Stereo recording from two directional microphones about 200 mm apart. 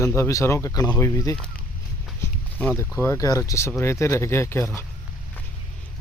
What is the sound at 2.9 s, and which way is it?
Speech, 15° left (ahead or behind).